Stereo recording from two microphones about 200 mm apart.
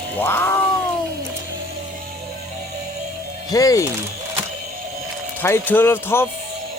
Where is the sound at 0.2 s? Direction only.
10° left (ahead or behind).